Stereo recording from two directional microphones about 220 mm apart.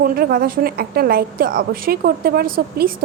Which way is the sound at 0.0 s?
45° right (ahead or behind).